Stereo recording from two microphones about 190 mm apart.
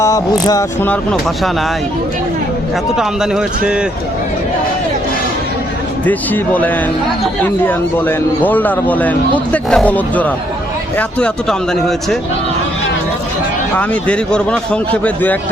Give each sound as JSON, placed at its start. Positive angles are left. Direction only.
{"t": 0.0, "sound": "a man's voice", "side_deg": 15}
{"t": 3.0, "sound": "speech", "side_deg": -5}
{"t": 6.1, "sound": "a man's voice", "side_deg": 10}
{"t": 13.7, "sound": "a man's voice", "side_deg": 5}